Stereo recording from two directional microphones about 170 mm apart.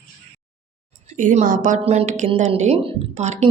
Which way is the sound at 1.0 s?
45° right (ahead or behind).